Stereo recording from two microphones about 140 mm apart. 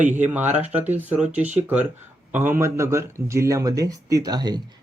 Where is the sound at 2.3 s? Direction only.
15° right (ahead or behind).